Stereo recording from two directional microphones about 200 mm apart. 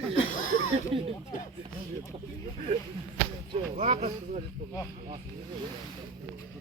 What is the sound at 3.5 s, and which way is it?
Speech, 35° right (ahead or behind).